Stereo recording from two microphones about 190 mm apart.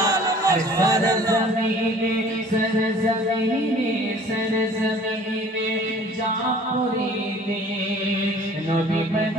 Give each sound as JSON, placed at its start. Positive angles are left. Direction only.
{"t": 0.1, "sound": "speech", "side_deg": -15}